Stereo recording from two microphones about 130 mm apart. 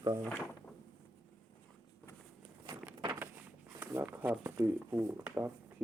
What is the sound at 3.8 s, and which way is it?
Speech, 20° right (ahead or behind).